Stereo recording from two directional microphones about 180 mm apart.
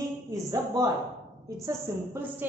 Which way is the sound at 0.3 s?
20° right (ahead or behind).